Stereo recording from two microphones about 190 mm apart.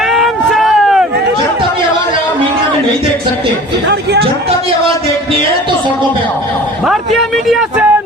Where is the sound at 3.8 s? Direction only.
60° right (ahead or behind).